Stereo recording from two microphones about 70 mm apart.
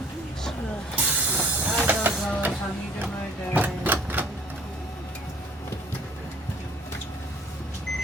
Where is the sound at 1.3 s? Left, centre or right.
Right.